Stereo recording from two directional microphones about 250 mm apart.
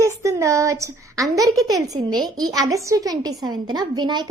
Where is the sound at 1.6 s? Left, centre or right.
Centre.